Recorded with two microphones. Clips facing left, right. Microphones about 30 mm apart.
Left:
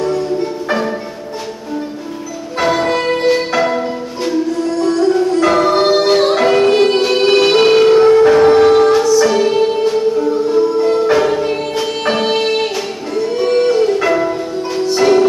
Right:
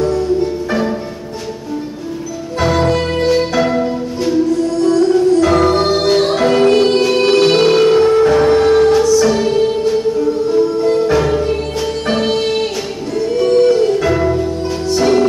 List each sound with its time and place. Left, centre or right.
2.6 s music: centre
13.5 s music: left
13.8 s music: centre